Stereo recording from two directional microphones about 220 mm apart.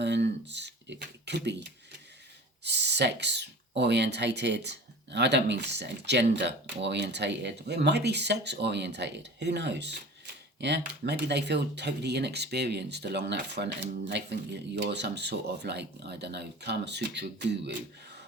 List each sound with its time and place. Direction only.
0.0 s speech: 50° right (ahead or behind)
2.6 s speech: 50° right (ahead or behind)